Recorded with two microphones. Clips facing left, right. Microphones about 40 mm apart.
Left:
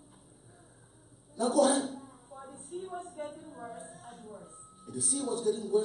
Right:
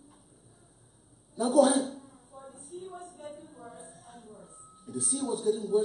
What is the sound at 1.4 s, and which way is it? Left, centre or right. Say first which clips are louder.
Speech: right 3 dB; centre.